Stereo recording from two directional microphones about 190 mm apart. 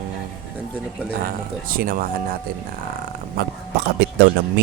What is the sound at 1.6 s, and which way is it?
Speech, 50° right (ahead or behind).